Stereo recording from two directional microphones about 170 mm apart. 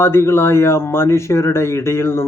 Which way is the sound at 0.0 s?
15° left (ahead or behind).